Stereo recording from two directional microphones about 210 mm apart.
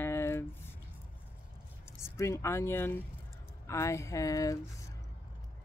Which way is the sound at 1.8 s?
15° left (ahead or behind).